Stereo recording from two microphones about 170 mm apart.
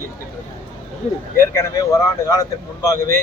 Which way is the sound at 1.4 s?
15° left (ahead or behind).